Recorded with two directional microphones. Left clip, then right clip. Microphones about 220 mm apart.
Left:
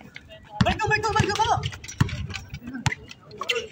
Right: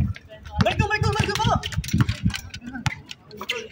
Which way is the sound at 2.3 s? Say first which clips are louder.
Right 4 dB; 40° right (ahead or behind).